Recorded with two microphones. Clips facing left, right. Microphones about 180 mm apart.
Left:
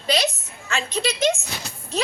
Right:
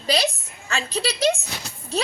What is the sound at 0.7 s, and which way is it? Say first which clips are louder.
Speech: left 1 dB; 35° right (ahead or behind).